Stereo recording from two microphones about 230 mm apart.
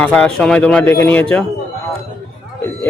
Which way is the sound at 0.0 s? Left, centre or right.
Centre.